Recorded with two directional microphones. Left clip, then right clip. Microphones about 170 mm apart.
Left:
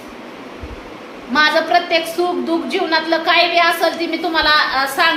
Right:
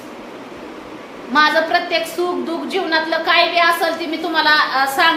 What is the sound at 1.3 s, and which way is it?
A woman's voice, 15° left (ahead or behind).